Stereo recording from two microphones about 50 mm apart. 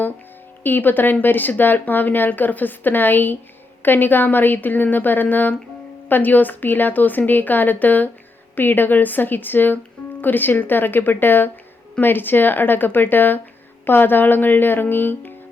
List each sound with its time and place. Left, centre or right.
0.6 s speech: left